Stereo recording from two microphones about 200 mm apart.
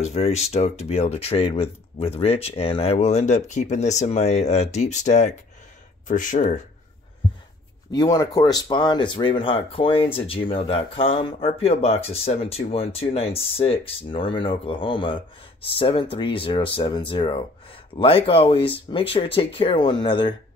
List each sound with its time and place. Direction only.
0.0 s speech: 30° left (ahead or behind)
7.9 s speech: 20° left (ahead or behind)